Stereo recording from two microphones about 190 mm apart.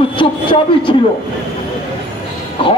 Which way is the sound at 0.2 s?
30° left (ahead or behind).